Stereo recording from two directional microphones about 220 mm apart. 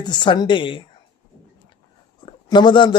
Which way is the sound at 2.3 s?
20° left (ahead or behind).